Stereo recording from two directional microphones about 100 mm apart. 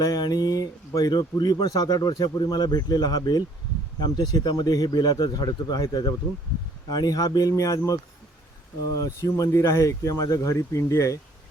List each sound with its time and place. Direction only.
0.0 s speech: 40° left (ahead or behind)
9.0 s speech: 35° left (ahead or behind)